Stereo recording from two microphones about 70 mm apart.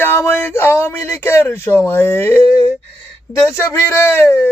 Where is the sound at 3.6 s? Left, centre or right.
Left.